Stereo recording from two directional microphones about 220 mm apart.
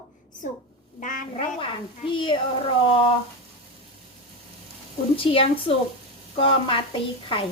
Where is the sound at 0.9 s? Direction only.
35° left (ahead or behind).